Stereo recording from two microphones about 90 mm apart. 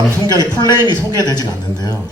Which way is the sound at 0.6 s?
45° left (ahead or behind).